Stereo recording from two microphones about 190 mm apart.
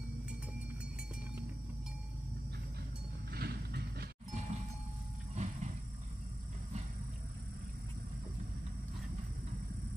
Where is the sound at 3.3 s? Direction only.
55° right (ahead or behind).